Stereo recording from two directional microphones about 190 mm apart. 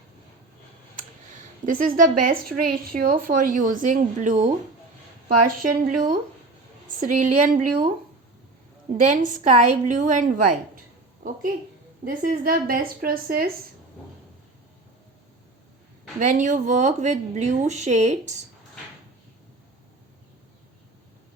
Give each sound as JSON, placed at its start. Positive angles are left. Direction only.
{"t": 1.6, "sound": "speech", "side_deg": -45}
{"t": 7.0, "sound": "speech", "side_deg": -40}
{"t": 9.0, "sound": "a woman's voice", "side_deg": -40}
{"t": 12.0, "sound": "speech", "side_deg": -50}
{"t": 16.2, "sound": "a woman's voice", "side_deg": -40}